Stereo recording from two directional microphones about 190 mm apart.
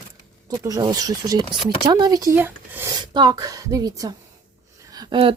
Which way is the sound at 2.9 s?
20° right (ahead or behind).